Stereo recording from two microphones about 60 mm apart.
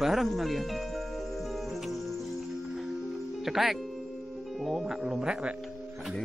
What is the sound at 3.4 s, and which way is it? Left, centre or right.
Speech, centre.